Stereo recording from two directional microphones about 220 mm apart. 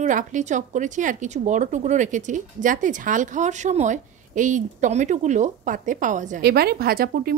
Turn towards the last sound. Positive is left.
turn(degrees=-40)  # may be behind; listen again after turning